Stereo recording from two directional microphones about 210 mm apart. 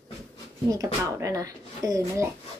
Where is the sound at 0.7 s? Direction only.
15° right (ahead or behind).